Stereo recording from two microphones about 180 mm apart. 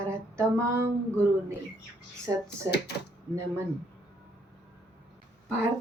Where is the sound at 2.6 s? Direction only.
65° left (ahead or behind).